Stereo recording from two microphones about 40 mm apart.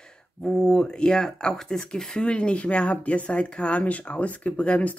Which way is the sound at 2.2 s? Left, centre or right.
Left.